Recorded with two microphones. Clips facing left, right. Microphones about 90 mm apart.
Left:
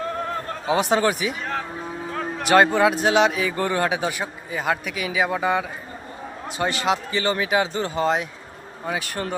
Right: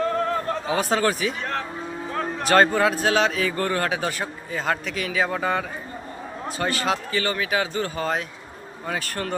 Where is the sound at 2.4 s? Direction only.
15° left (ahead or behind).